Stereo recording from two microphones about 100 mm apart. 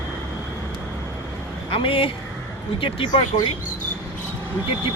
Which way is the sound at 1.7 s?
60° left (ahead or behind).